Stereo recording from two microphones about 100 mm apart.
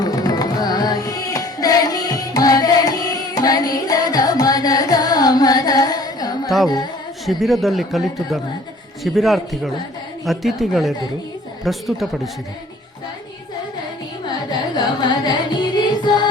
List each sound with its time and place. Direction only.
0.0 s music: 40° left (ahead or behind)
7.3 s speech: centre (ahead or behind)
15.2 s music: 45° left (ahead or behind)